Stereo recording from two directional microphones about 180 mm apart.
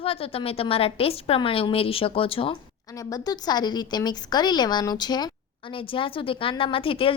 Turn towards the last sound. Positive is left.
turn(degrees=30)  # may be behind; listen again after turning